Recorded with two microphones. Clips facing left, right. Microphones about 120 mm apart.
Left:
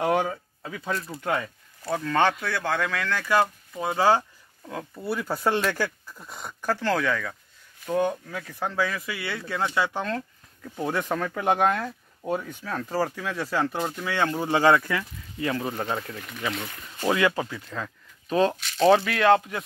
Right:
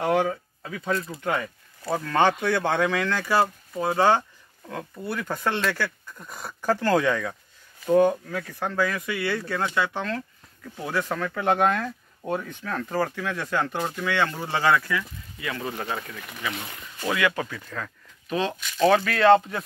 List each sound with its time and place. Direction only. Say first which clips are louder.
0.2 s speech: right 3 dB; 10° left (ahead or behind)
1.9 s speech: right 1 dB; 5° right (ahead or behind)
2.3 s speech: right 4 dB; 25° right (ahead or behind)
7.8 s speech: right 6 dB; 5° right (ahead or behind)
9.8 s speech: even; 15° left (ahead or behind)
14.9 s speech: even; 35° left (ahead or behind)
17.1 s speech: left 2 dB; 25° left (ahead or behind)
18.3 s speech: left 4 dB; 35° left (ahead or behind)
19.0 s speech: right 2 dB; 10° left (ahead or behind)